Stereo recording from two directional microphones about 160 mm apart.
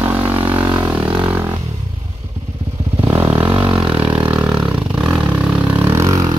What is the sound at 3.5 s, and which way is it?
Vehicle, 25° right (ahead or behind).